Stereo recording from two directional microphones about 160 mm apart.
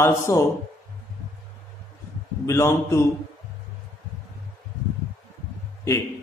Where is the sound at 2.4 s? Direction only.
20° left (ahead or behind).